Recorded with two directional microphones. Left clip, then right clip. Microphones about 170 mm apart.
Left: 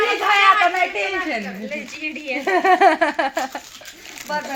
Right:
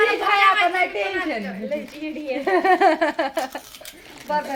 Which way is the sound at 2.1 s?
25° right (ahead or behind).